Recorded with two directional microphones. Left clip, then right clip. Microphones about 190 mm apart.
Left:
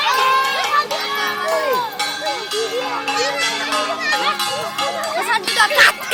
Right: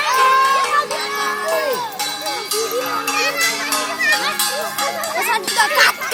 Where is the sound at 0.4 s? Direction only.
35° left (ahead or behind).